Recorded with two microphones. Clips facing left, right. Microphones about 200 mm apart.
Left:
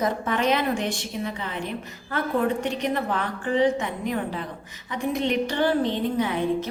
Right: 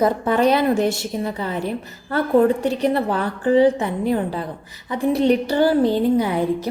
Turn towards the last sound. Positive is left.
turn(degrees=-35)  # may be behind; listen again after turning